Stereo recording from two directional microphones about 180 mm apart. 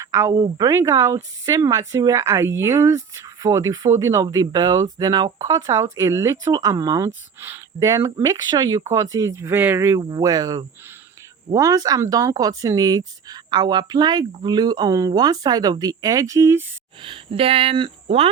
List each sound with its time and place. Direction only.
0.0 s speech: 20° right (ahead or behind)
17.0 s speech: 30° right (ahead or behind)